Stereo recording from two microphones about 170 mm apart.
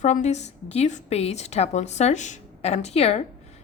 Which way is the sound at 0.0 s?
45° left (ahead or behind).